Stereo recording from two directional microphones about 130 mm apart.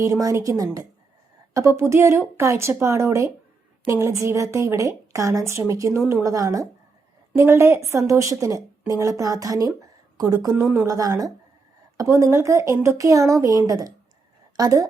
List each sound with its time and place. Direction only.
0.0 s a woman's voice: 25° right (ahead or behind)
10.6 s speech: 10° right (ahead or behind)
10.8 s a woman's voice: 25° right (ahead or behind)